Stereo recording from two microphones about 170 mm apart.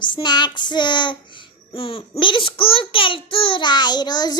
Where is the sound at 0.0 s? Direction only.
25° left (ahead or behind).